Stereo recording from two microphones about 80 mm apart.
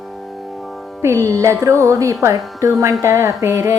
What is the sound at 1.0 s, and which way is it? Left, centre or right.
Music, right.